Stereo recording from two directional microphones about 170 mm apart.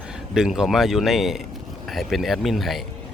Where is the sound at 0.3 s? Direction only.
5° right (ahead or behind).